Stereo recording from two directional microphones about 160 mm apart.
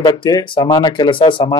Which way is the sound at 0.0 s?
25° left (ahead or behind).